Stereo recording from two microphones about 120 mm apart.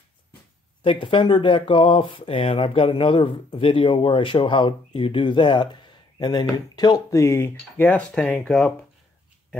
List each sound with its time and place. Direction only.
0.8 s speech: 45° left (ahead or behind); by 8.7 s 10° left (ahead or behind)